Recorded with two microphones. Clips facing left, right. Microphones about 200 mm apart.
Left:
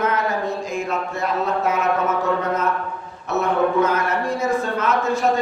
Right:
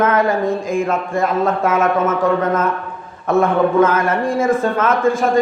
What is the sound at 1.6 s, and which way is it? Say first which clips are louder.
A man's voice: right 5 dB; 90° right.